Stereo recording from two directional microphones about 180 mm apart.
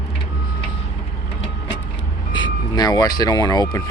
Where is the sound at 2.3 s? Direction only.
25° left (ahead or behind).